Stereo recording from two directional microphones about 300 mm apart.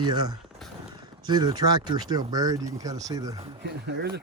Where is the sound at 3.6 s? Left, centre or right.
Right.